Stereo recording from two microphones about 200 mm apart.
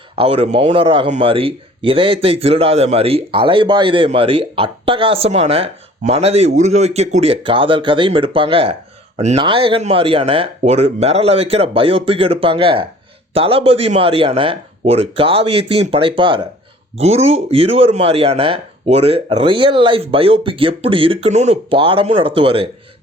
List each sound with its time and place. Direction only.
0.2 s a man's voice: 30° right (ahead or behind)